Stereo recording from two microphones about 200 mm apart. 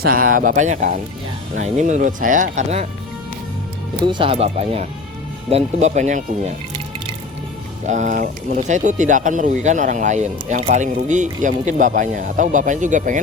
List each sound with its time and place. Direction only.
0.0 s speech: 45° right (ahead or behind)
4.0 s speech: 25° right (ahead or behind)
7.9 s speech: 40° right (ahead or behind)